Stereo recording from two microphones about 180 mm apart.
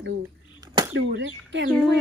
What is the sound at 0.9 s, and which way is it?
Speech, 80° right.